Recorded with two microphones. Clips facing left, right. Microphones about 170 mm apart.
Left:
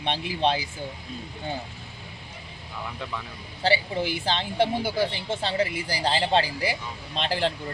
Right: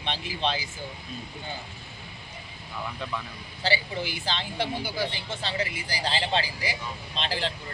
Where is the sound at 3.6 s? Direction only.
55° left (ahead or behind).